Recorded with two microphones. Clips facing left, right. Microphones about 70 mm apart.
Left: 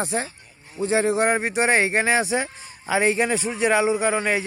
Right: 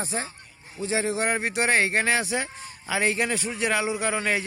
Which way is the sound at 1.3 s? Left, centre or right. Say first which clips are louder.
Left 3 dB; centre.